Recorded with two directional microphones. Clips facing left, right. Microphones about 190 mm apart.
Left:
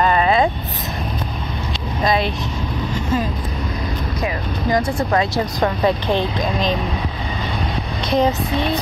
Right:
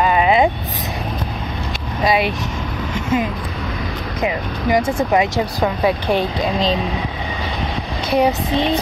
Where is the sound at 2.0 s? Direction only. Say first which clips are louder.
Right 2 dB; 10° right (ahead or behind).